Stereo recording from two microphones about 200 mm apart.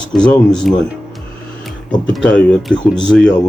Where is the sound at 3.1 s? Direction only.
Centre (ahead or behind).